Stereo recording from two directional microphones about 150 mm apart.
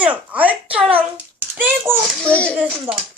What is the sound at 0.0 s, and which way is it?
A child's voice, 10° right (ahead or behind).